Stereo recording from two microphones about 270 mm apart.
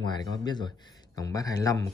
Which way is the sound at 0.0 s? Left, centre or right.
Centre.